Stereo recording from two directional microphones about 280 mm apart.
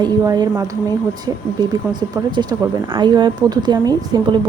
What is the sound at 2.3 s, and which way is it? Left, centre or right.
Speech, centre.